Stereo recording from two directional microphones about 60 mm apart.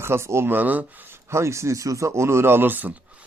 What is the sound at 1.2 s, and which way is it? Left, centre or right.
Speech, right.